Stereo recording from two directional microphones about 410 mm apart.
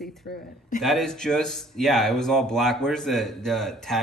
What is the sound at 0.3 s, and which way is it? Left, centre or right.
Speech, left.